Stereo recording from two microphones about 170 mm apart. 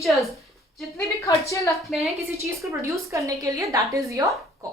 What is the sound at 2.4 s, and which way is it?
A woman's voice, 20° right (ahead or behind).